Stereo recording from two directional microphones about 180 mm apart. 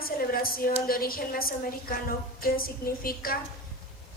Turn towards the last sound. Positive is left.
turn(degrees=55)  # may be behind; listen again after turning